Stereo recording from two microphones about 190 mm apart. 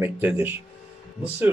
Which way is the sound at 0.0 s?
10° right (ahead or behind).